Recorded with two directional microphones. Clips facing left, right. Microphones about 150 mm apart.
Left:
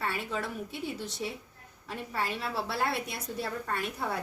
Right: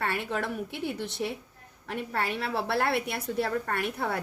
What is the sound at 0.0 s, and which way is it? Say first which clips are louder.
A woman's voice: right 3 dB; 65° right (ahead or behind).